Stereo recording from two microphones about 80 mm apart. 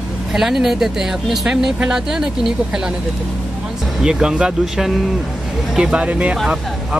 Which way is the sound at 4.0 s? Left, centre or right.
Centre.